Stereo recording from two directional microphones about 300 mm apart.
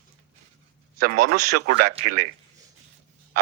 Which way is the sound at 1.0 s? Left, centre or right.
Right.